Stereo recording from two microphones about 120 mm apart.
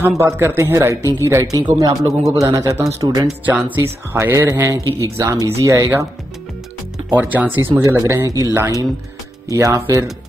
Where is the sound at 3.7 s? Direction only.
20° right (ahead or behind).